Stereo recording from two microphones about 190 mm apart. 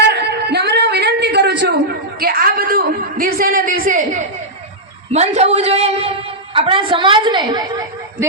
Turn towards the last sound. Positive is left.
turn(degrees=-20)  # may be behind; listen again after turning